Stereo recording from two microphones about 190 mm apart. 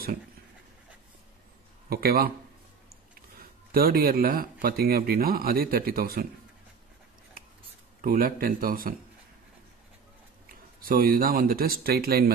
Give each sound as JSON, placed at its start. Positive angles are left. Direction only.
{"t": 1.9, "sound": "speech", "side_deg": -55}
{"t": 3.7, "sound": "speech", "side_deg": -50}
{"t": 8.0, "sound": "speech", "side_deg": -50}
{"t": 10.8, "sound": "speech", "side_deg": -50}